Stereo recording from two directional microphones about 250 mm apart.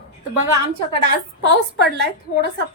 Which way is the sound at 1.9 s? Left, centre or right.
Right.